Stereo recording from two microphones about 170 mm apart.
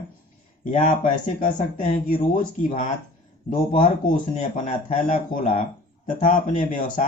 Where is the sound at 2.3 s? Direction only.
50° left (ahead or behind).